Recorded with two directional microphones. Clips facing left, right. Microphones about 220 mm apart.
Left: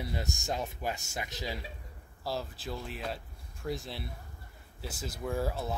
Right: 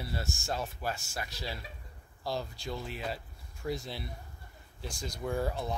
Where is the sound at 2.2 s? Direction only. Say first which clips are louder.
Even; centre (ahead or behind).